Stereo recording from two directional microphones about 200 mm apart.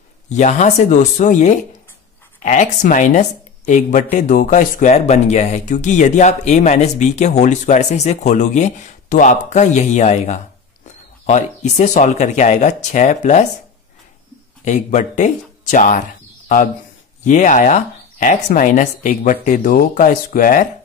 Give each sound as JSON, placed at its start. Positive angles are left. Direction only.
{"t": 0.3, "sound": "a woman's voice", "side_deg": 35}
{"t": 14.6, "sound": "speech", "side_deg": 40}
{"t": 17.2, "sound": "a woman's voice", "side_deg": 40}